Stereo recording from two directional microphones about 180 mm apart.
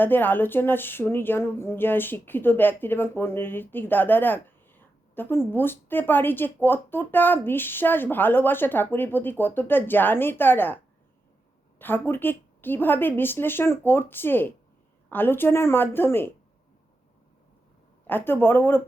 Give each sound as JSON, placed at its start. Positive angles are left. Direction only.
{"t": 0.0, "sound": "speech", "side_deg": 10}
{"t": 11.8, "sound": "speech", "side_deg": 10}
{"t": 18.0, "sound": "speech", "side_deg": 10}